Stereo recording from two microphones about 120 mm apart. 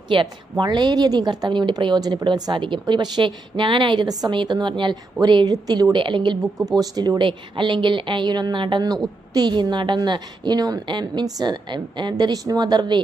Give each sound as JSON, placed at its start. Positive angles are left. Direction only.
{"t": 0.1, "sound": "a woman's voice", "side_deg": -40}